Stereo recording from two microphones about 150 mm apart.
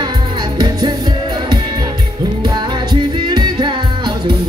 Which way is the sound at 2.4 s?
30° right (ahead or behind).